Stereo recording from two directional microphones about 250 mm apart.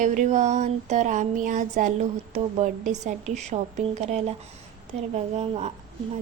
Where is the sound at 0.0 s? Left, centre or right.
Right.